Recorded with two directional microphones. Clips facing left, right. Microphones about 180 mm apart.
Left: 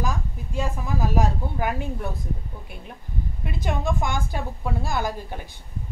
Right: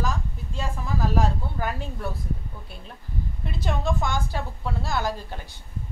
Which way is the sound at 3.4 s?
15° left (ahead or behind).